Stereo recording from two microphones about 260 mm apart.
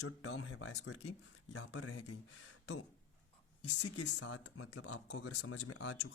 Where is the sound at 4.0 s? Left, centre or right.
Left.